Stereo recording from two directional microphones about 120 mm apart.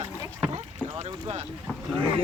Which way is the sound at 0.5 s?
65° right (ahead or behind).